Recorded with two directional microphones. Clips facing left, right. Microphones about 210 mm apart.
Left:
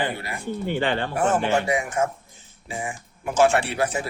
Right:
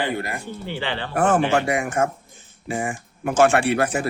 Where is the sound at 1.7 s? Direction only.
55° right (ahead or behind).